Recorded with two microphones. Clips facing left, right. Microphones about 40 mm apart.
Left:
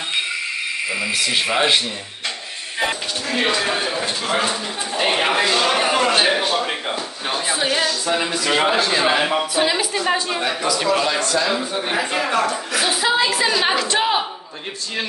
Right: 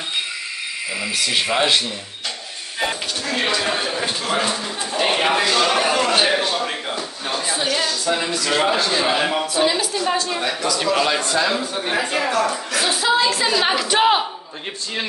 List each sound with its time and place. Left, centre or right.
1.2 s speech: centre
2.8 s speech: centre
5.8 s a sound: centre
7.7 s a man's voice: centre
11.1 s a man's voice: right
11.7 s a woman's voice: centre